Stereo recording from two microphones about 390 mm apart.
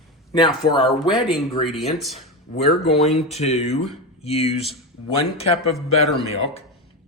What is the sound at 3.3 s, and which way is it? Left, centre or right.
Speech, centre.